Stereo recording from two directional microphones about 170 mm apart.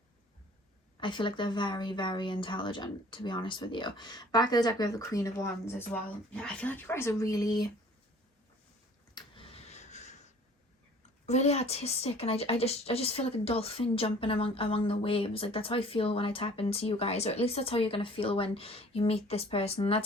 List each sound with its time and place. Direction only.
0.9 s speech: 30° left (ahead or behind)
9.1 s vehicle: 30° left (ahead or behind)
11.3 s a woman's voice: 40° left (ahead or behind)